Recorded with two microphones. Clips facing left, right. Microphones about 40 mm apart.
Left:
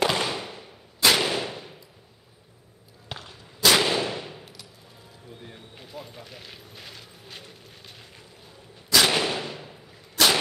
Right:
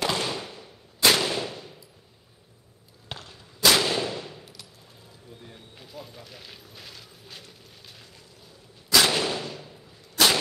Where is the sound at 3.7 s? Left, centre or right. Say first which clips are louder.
Left 2 dB; centre.